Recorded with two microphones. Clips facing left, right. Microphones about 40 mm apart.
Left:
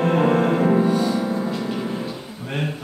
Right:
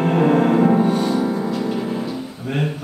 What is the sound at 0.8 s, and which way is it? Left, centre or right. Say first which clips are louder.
Music: right 1 dB; right.